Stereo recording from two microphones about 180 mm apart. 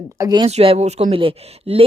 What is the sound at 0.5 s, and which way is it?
Speech, 35° right (ahead or behind).